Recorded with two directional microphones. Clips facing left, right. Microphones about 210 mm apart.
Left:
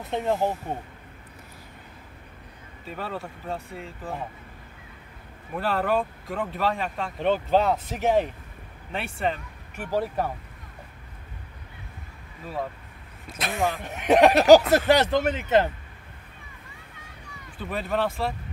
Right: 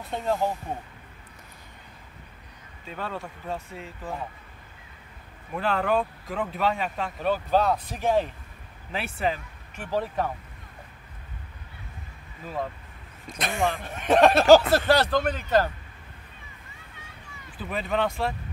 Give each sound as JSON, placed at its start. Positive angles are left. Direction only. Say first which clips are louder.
{"t": 0.0, "sound": "speech", "louder": "left 2 dB", "side_deg": 20}
{"t": 2.9, "sound": "speech", "louder": "left 1 dB", "side_deg": 5}
{"t": 5.5, "sound": "speech", "louder": "even", "side_deg": 0}
{"t": 7.2, "sound": "speech", "louder": "left 2 dB", "side_deg": 25}
{"t": 8.9, "sound": "speech", "louder": "even", "side_deg": 0}
{"t": 9.8, "sound": "speech", "louder": "left 1 dB", "side_deg": 10}
{"t": 13.3, "sound": "speech", "louder": "even", "side_deg": 0}
{"t": 13.8, "sound": "speech", "louder": "left 2 dB", "side_deg": 15}
{"t": 17.6, "sound": "speech", "louder": "even", "side_deg": 0}